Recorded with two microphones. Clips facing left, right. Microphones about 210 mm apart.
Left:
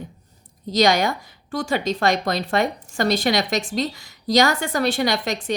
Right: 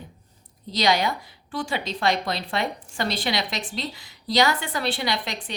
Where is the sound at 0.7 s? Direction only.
45° left (ahead or behind).